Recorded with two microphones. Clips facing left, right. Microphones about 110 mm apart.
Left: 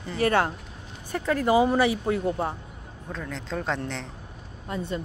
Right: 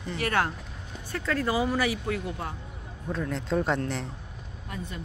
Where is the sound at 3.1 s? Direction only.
5° right (ahead or behind).